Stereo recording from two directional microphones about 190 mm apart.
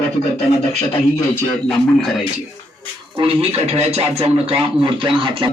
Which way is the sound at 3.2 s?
35° right (ahead or behind).